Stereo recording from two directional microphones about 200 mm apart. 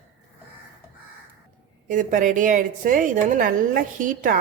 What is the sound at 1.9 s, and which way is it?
A woman's voice, 40° right (ahead or behind).